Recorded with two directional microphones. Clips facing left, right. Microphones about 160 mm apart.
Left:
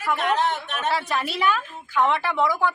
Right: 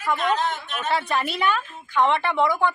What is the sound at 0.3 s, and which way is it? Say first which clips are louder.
Speech: left 2 dB; 65° left (ahead or behind).